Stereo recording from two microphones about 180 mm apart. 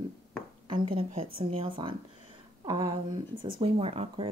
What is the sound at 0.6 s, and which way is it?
Speech, 30° right (ahead or behind).